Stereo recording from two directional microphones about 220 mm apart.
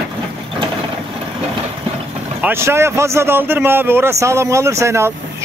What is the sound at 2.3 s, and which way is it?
Speech, 10° right (ahead or behind).